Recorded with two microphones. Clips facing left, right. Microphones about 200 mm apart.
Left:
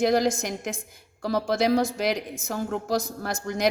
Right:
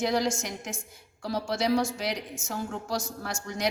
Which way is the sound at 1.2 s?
55° left (ahead or behind).